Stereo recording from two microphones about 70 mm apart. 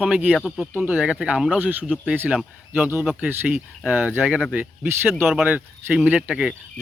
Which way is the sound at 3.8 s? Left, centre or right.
Right.